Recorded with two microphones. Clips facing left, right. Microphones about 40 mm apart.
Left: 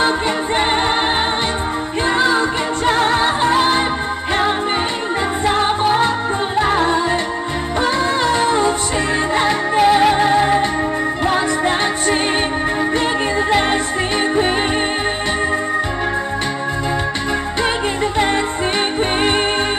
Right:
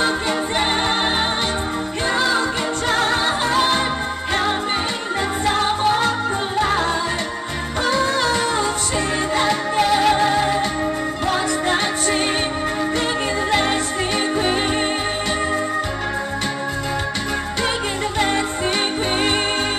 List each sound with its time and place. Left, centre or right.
2.0 s music: left
5.4 s music: left
13.5 s music: centre
18.1 s music: centre